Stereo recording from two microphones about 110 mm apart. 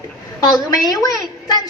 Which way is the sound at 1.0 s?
35° left (ahead or behind).